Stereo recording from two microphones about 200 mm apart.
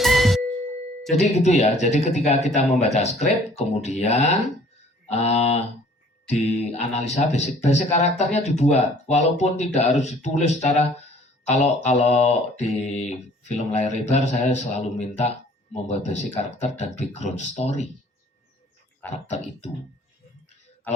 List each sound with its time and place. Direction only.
0.0 s music: centre (ahead or behind)
1.1 s mantra: 35° left (ahead or behind)
19.0 s speech: 10° left (ahead or behind)
19.6 s mantra: 35° left (ahead or behind)